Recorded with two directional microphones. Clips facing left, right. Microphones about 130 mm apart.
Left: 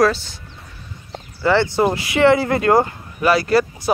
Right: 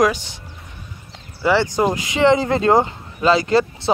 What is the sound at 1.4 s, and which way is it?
Speech, 15° right (ahead or behind).